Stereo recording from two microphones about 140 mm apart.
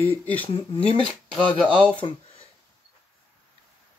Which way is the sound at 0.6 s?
40° left (ahead or behind).